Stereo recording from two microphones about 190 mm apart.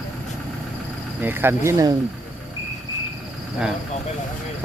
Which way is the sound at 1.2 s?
10° right (ahead or behind).